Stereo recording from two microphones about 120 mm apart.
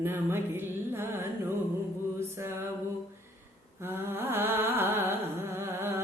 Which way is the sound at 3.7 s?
20° right (ahead or behind).